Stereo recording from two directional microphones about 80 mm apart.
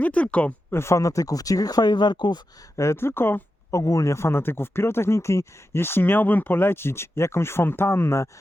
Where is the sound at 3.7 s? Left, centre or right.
Left.